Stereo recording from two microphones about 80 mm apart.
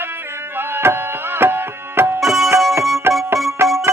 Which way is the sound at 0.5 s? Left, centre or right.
Right.